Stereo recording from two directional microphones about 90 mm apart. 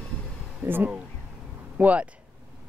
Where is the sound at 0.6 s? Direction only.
20° right (ahead or behind).